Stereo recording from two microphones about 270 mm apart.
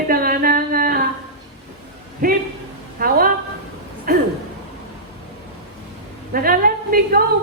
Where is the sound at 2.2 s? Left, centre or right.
Right.